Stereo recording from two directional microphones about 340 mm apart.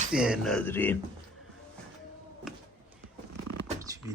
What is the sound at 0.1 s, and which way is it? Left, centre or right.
Speech, centre.